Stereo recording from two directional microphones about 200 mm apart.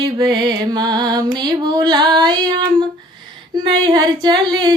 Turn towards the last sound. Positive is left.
turn(degrees=-25)  # may be behind; listen again after turning